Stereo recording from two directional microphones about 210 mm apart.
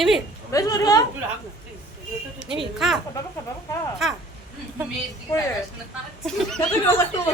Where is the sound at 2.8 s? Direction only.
Centre (ahead or behind).